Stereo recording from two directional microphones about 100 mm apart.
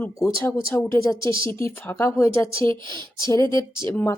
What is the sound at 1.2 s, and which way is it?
Speech, 60° right (ahead or behind).